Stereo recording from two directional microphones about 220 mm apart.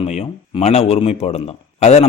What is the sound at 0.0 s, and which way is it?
A man's voice, 30° left (ahead or behind).